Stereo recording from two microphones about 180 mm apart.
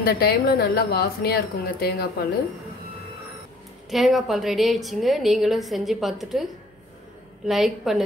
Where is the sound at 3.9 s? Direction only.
Centre (ahead or behind).